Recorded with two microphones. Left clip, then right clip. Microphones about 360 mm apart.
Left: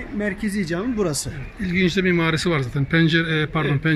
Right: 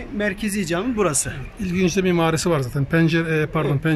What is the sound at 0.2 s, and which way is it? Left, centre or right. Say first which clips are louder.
Speech: right 2 dB; right.